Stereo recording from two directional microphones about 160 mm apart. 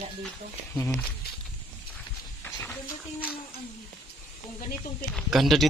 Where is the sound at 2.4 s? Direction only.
10° left (ahead or behind).